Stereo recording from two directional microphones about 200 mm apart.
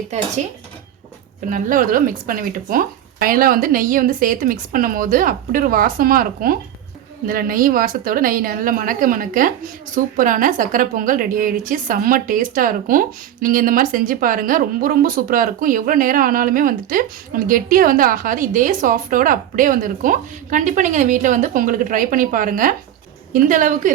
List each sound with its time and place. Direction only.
1.5 s a woman's voice: 40° right (ahead or behind)